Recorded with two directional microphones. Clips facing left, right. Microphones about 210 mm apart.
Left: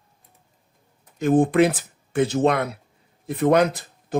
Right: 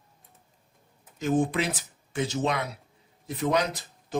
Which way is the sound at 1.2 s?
55° left (ahead or behind).